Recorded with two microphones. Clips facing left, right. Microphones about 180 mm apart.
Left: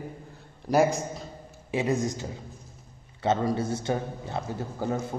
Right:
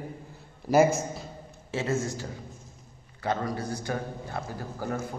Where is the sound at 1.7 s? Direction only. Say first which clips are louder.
Left 3 dB; 15° left (ahead or behind).